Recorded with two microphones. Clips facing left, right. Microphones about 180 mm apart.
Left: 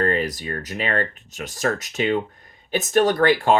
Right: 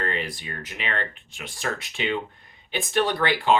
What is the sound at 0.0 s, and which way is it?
Speech, 45° left (ahead or behind).